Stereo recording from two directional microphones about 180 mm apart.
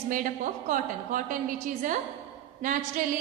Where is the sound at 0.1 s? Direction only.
50° right (ahead or behind).